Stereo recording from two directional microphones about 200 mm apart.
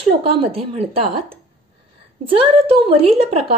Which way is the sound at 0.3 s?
30° right (ahead or behind).